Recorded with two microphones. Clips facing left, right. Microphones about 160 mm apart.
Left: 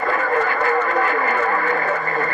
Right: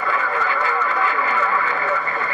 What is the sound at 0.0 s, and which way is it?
Radio, 45° left (ahead or behind).